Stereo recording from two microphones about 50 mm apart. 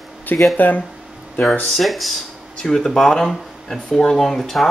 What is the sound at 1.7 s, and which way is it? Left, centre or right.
Speech, centre.